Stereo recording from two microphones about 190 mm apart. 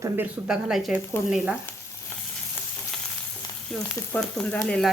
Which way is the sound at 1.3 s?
5° right (ahead or behind).